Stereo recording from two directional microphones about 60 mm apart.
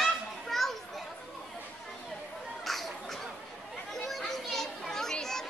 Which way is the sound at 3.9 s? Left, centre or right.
Centre.